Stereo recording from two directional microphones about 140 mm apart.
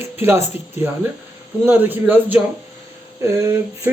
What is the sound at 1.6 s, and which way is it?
Speech, 15° right (ahead or behind).